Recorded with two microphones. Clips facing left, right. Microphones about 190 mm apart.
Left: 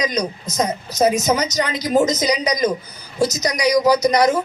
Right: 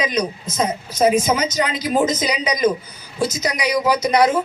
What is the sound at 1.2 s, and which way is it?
Speech, 40° left (ahead or behind).